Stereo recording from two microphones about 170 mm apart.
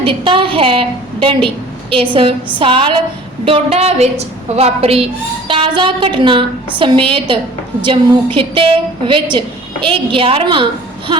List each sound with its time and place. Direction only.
0.0 s a woman's voice: 30° right (ahead or behind)
2.6 s a woman's voice: 30° right (ahead or behind)